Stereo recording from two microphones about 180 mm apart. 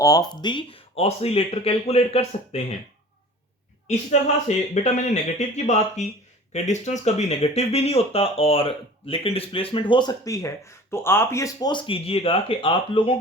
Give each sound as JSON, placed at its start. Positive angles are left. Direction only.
{"t": 0.0, "sound": "speech", "side_deg": 20}
{"t": 3.8, "sound": "speech", "side_deg": 40}